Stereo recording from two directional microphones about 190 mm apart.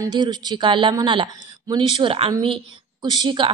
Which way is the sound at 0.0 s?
20° right (ahead or behind).